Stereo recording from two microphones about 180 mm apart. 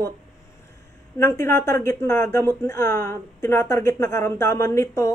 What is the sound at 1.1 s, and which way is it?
Speech, 15° left (ahead or behind).